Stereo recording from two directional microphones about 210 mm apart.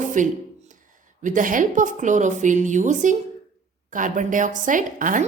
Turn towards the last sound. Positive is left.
turn(degrees=-40)  # may be behind; listen again after turning